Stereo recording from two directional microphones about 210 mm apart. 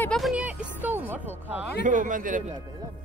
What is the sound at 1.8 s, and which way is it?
Speech, 40° right (ahead or behind).